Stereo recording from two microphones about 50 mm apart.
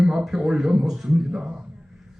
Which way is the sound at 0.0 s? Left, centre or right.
Centre.